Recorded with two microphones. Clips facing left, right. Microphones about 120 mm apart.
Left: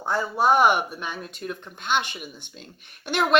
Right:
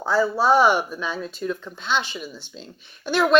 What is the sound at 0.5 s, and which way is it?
Speech, 55° left (ahead or behind).